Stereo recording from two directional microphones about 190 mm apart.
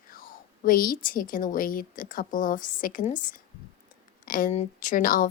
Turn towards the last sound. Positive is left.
turn(degrees=45)  # may be behind; listen again after turning